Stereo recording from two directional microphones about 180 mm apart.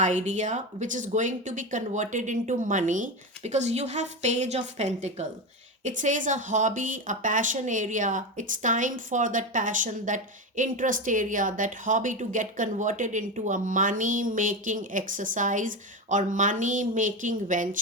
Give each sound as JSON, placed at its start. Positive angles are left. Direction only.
{"t": 0.0, "sound": "a woman's voice", "side_deg": -40}